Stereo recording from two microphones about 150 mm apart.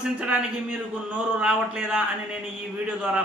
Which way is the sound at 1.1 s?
5° right (ahead or behind).